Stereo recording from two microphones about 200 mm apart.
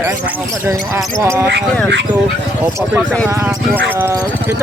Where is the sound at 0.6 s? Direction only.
15° right (ahead or behind).